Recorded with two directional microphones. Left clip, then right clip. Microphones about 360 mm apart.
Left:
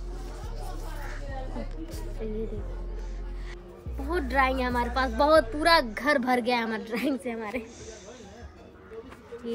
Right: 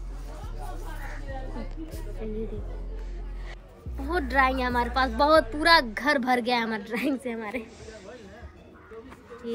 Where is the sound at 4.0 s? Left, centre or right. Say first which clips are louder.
Right 2 dB; centre.